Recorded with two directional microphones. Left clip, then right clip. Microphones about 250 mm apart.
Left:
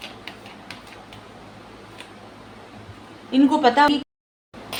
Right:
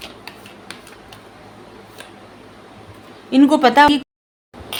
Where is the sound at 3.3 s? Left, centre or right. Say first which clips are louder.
Right 5 dB; right.